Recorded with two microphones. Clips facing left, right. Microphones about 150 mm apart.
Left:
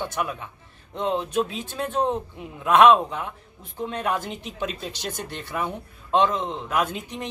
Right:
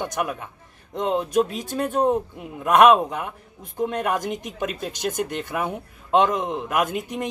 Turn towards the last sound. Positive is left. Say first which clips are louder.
# right 2 dB
turn(degrees=-10)  # may be behind; listen again after turning